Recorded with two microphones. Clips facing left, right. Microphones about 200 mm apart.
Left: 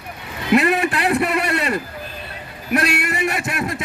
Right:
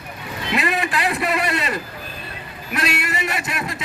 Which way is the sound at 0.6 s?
60° left (ahead or behind).